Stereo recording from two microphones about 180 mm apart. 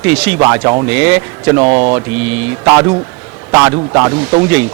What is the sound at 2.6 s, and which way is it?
Speech, 20° right (ahead or behind).